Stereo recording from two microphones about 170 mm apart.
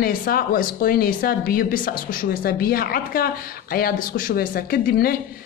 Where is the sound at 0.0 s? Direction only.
60° left (ahead or behind).